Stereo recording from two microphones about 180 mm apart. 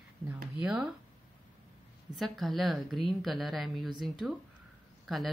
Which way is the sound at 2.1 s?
Centre (ahead or behind).